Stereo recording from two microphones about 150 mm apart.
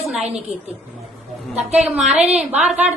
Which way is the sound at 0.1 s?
5° right (ahead or behind).